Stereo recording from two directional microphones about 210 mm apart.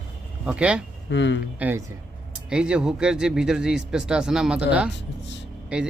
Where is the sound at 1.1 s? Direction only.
60° left (ahead or behind).